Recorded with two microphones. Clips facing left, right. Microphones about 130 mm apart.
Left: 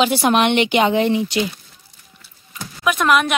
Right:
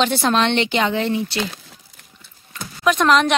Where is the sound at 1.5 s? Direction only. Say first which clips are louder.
Right 5 dB; 75° right (ahead or behind).